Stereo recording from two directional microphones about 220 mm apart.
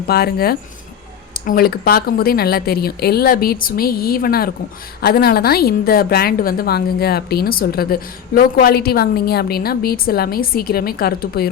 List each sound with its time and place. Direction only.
0.1 s a woman's voice: 45° left (ahead or behind)